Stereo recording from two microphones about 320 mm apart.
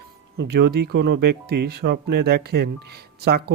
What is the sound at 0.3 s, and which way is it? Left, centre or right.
Speech, right.